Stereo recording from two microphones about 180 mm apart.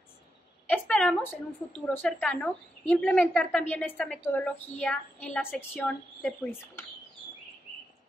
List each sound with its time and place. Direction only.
0.7 s a woman's voice: 10° left (ahead or behind)